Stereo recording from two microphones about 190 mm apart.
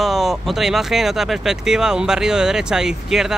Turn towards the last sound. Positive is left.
turn(degrees=0)  # may be behind; listen again after turning